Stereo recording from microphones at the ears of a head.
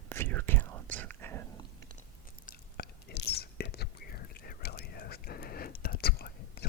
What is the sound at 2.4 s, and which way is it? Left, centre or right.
Whispering, left.